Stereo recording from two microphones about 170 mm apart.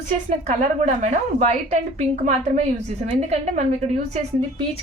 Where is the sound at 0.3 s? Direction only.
45° right (ahead or behind).